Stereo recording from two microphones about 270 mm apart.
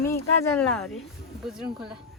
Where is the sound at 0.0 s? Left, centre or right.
Centre.